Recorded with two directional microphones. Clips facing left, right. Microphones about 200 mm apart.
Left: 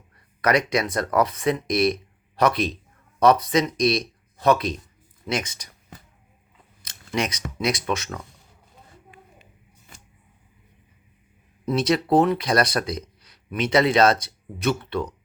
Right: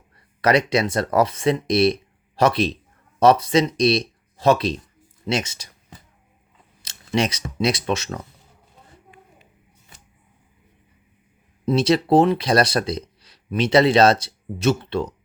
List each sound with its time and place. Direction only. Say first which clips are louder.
0.4 s speech: right 3 dB; 30° right (ahead or behind)
6.8 s speech: right 4 dB; 30° right (ahead or behind)
11.6 s speech: right 3 dB; 30° right (ahead or behind)